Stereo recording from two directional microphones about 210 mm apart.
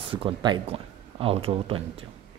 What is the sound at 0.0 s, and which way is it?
Speech, 25° right (ahead or behind).